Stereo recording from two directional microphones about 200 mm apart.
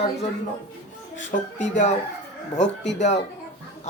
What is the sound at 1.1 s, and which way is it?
Speech, 35° left (ahead or behind).